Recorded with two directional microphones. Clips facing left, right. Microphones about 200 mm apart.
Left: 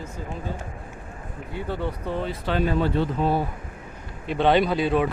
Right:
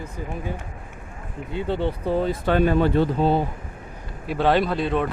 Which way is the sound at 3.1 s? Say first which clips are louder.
Right 3 dB; 30° right (ahead or behind).